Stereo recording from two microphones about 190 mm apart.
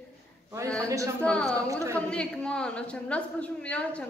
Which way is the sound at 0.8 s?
15° right (ahead or behind).